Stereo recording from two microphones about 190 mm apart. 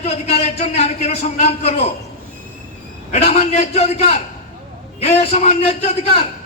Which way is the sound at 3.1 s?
35° left (ahead or behind).